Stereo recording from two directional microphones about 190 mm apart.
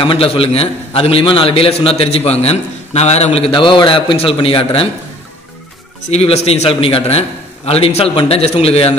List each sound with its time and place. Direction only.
0.0 s a man's voice: 30° left (ahead or behind)
6.0 s a man's voice: 35° left (ahead or behind)